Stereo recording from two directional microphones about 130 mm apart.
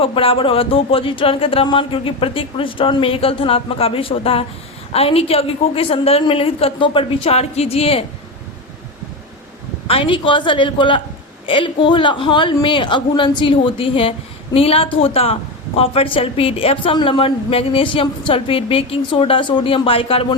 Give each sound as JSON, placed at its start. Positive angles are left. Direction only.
{"t": 0.0, "sound": "speech", "side_deg": 45}
{"t": 9.8, "sound": "a woman's voice", "side_deg": 45}